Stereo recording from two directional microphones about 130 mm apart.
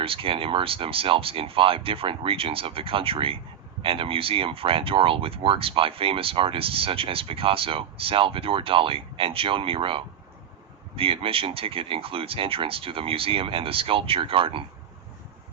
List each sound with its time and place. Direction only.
0.0 s speech: 45° right (ahead or behind)